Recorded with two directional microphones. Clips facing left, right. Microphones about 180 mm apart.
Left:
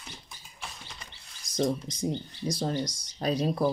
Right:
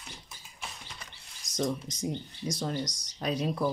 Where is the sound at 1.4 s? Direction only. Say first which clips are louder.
Left 3 dB; 30° left (ahead or behind).